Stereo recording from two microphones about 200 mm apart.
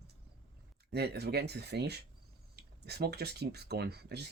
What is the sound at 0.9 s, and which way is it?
Speech, 55° right (ahead or behind).